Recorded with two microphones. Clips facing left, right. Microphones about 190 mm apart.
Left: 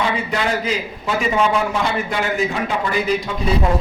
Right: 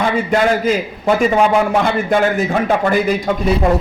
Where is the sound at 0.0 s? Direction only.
50° right (ahead or behind).